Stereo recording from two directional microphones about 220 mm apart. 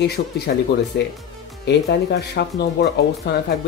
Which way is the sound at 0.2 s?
40° left (ahead or behind).